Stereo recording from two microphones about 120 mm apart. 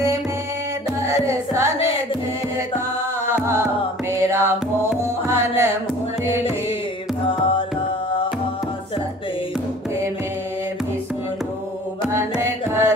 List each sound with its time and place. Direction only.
1.0 s music: 25° right (ahead or behind)
3.3 s music: 20° right (ahead or behind)
7.2 s music: 45° left (ahead or behind)
12.1 s music: 25° right (ahead or behind)